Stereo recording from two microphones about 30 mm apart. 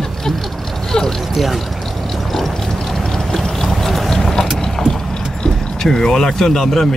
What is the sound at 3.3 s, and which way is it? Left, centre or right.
Boat, centre.